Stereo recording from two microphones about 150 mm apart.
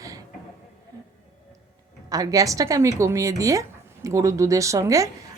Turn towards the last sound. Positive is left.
turn(degrees=-20)  # may be behind; listen again after turning